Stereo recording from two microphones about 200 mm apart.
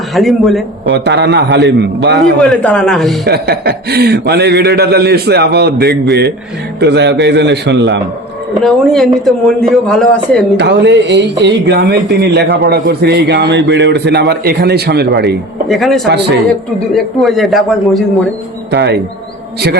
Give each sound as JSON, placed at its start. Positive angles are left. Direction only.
{"t": 0.1, "sound": "speech", "side_deg": 0}
{"t": 0.9, "sound": "speech", "side_deg": -60}
{"t": 2.4, "sound": "speech", "side_deg": 5}
{"t": 3.2, "sound": "a man's voice", "side_deg": -55}
{"t": 8.6, "sound": "speech", "side_deg": 0}
{"t": 10.6, "sound": "speech", "side_deg": -60}
{"t": 15.7, "sound": "speech", "side_deg": 0}
{"t": 18.7, "sound": "speech", "side_deg": -60}